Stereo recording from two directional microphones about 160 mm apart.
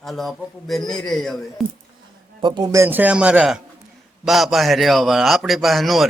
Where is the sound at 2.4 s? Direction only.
25° right (ahead or behind).